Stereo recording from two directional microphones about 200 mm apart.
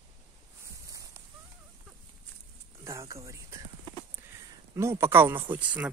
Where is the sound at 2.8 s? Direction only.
15° right (ahead or behind).